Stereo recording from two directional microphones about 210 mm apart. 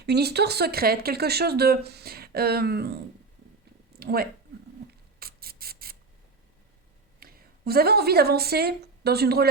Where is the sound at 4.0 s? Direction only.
45° right (ahead or behind).